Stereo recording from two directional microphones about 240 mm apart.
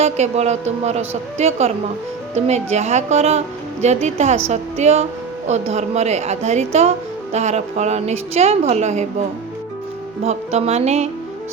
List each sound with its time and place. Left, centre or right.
0.0 s a woman's voice: right
10.2 s a woman's voice: right